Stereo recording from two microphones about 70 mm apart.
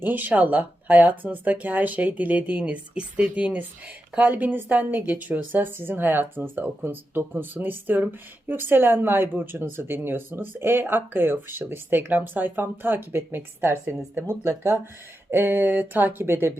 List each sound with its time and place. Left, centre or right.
0.0 s a woman's voice: right